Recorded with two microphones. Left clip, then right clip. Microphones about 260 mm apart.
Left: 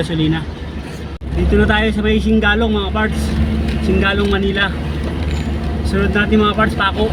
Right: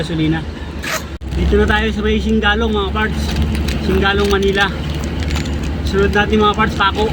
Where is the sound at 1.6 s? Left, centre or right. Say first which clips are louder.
Left 1 dB; centre.